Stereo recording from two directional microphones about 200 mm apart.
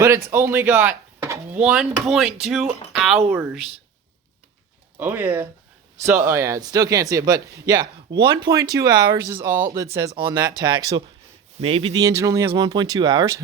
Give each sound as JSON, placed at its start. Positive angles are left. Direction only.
{"t": 0.0, "sound": "speech", "side_deg": -15}
{"t": 2.9, "sound": "a sound", "side_deg": 0}
{"t": 3.2, "sound": "speech", "side_deg": -10}
{"t": 4.9, "sound": "speech", "side_deg": -10}
{"t": 12.0, "sound": "speech", "side_deg": -15}